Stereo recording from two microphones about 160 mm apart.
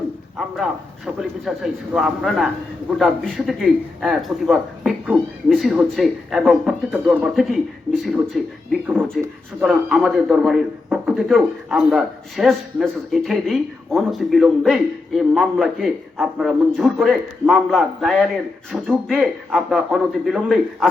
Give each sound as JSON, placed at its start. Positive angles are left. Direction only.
{"t": 0.3, "sound": "a man's voice", "side_deg": 0}